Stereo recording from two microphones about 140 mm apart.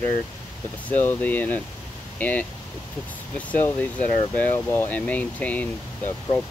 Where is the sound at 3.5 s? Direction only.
10° left (ahead or behind).